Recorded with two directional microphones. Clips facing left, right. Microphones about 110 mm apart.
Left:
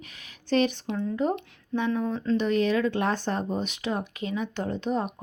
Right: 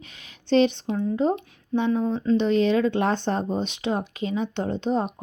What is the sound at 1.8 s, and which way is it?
Speech, 25° right (ahead or behind).